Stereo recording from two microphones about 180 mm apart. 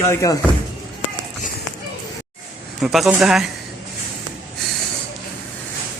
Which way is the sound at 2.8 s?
Centre (ahead or behind).